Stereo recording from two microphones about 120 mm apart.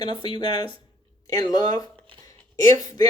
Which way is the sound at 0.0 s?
40° left (ahead or behind).